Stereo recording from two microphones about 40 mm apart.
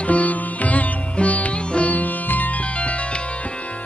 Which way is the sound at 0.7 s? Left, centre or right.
Left.